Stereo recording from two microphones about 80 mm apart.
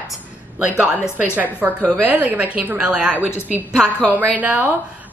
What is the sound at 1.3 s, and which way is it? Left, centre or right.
Speech, right.